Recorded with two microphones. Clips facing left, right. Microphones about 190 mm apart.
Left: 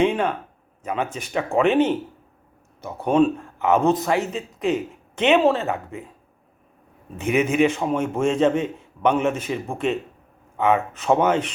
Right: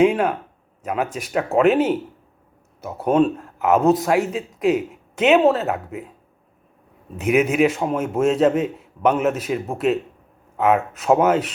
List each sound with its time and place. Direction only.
0.0 s speech: 5° right (ahead or behind)
7.2 s speech: 5° right (ahead or behind)